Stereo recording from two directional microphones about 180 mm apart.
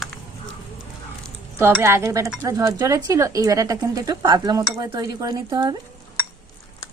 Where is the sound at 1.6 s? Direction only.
15° right (ahead or behind).